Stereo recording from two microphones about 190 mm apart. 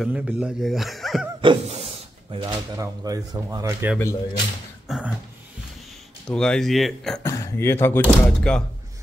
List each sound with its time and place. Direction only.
0.0 s speech: 5° right (ahead or behind)
1.4 s speech: 30° right (ahead or behind)
4.8 s a sound: 5° right (ahead or behind)
6.2 s speech: 5° left (ahead or behind)
7.2 s speech: 15° left (ahead or behind)